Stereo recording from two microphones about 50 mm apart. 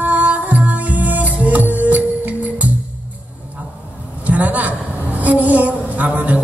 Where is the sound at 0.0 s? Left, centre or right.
Right.